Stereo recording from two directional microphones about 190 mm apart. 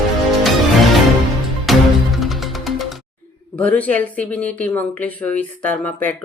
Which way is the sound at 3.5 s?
10° left (ahead or behind).